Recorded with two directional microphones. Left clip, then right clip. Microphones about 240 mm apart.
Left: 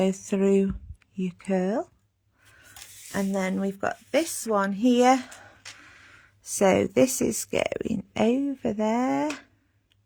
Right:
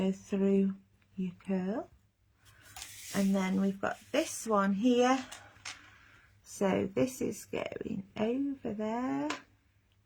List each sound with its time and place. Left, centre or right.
0.0 s speech: left
3.3 s a woman's voice: left
6.6 s speech: left